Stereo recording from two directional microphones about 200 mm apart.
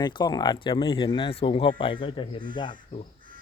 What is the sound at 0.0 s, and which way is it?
Speech, 20° left (ahead or behind).